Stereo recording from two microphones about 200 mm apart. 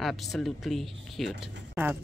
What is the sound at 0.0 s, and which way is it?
Speech, centre (ahead or behind).